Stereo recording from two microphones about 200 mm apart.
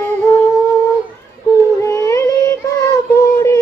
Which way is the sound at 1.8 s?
15° left (ahead or behind).